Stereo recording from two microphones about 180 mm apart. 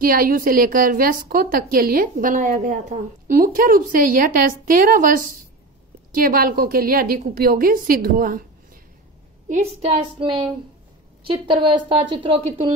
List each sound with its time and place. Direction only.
0.0 s a woman's voice: 55° right (ahead or behind)
9.5 s a woman's voice: 35° right (ahead or behind)